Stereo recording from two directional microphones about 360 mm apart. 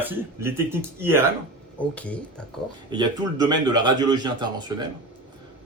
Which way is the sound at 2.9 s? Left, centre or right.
Centre.